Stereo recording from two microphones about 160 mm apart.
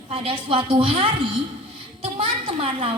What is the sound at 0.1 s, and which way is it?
A woman's voice, 35° right (ahead or behind).